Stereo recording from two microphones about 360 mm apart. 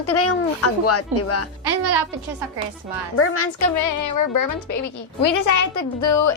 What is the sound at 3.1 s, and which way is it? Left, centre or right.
Speech, left.